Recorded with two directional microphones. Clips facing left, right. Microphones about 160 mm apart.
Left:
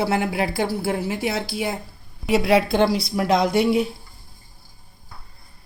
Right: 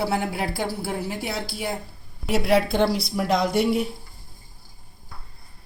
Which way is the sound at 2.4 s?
90° left.